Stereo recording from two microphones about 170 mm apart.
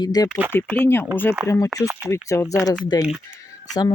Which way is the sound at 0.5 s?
10° left (ahead or behind).